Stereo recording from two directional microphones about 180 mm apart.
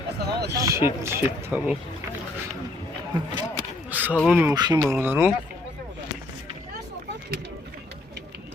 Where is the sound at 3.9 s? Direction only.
10° right (ahead or behind).